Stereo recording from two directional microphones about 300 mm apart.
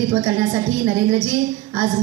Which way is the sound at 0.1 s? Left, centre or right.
Centre.